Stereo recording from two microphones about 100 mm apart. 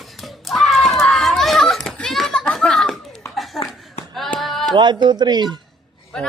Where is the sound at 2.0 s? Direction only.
5° left (ahead or behind).